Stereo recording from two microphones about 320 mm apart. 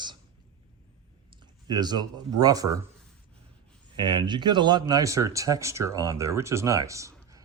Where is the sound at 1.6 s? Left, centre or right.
Centre.